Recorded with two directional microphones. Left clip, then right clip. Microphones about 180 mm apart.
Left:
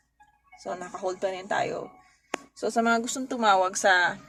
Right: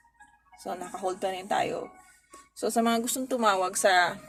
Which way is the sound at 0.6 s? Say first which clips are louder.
Left 1 dB; 15° left (ahead or behind).